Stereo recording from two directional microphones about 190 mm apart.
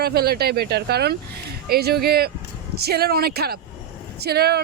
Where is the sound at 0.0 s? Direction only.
55° right (ahead or behind).